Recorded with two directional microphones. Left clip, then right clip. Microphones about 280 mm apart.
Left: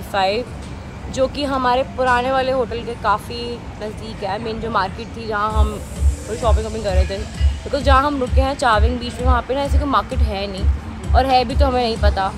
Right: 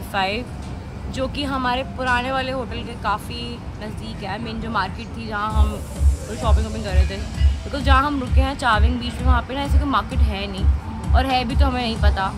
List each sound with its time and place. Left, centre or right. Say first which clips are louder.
0.1 s speech: left 4 dB; centre